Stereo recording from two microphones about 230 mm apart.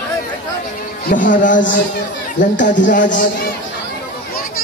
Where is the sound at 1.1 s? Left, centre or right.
Left.